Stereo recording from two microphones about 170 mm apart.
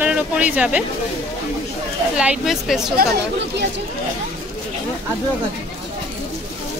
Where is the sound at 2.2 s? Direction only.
5° right (ahead or behind).